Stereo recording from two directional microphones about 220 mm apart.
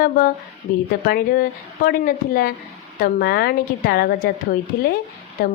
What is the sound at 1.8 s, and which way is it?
A woman's voice, 40° left (ahead or behind).